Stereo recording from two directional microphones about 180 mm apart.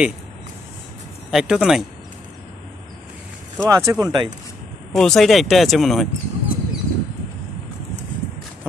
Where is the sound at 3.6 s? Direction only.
20° right (ahead or behind).